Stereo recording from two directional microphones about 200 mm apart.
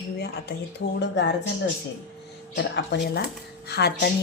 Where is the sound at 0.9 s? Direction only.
60° left (ahead or behind).